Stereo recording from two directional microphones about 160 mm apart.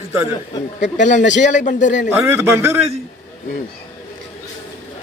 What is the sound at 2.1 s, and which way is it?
Speech, 15° right (ahead or behind).